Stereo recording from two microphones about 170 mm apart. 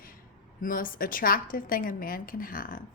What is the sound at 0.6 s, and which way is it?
A woman's voice, 55° left (ahead or behind).